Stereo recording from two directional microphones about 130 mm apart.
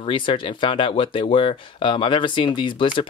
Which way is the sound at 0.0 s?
40° left (ahead or behind).